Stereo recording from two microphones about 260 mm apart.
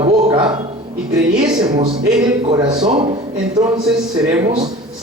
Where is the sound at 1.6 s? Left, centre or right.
Centre.